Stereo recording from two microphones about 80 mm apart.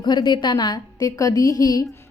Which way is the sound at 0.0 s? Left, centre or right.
Left.